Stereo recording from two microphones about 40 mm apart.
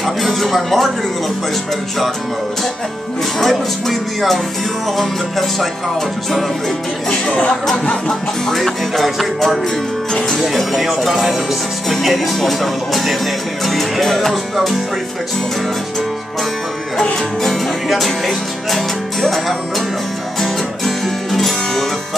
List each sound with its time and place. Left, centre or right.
0.0 s music: centre
3.3 s music: centre
7.1 s speech: left
8.1 s music: centre
10.1 s music: centre
10.6 s music: centre
16.9 s music: centre
17.5 s music: centre
20.3 s music: centre